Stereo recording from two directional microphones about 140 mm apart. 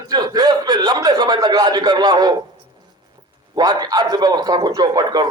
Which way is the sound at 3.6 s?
30° right (ahead or behind).